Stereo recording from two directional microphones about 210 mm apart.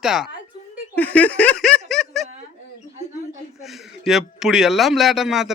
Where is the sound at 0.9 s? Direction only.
5° left (ahead or behind).